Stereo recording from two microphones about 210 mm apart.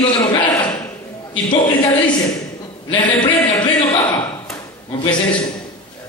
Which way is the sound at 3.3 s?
20° left (ahead or behind).